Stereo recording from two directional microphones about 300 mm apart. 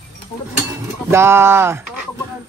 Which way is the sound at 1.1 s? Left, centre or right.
Centre.